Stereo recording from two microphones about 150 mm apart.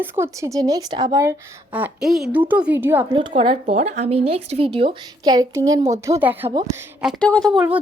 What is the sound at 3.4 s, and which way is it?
A woman's voice, 40° right (ahead or behind).